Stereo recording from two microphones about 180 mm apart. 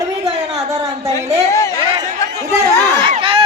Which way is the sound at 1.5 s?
15° left (ahead or behind).